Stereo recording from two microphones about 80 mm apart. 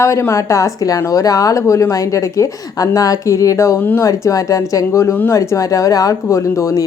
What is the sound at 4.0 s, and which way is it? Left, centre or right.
A woman's voice, left.